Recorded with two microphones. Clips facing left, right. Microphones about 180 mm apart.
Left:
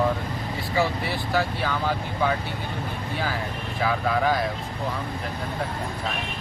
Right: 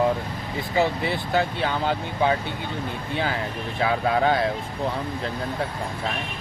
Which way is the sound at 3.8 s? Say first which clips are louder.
Right 2 dB; 25° right (ahead or behind).